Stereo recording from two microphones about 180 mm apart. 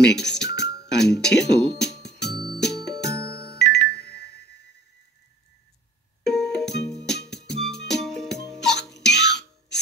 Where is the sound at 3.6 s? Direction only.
65° left (ahead or behind).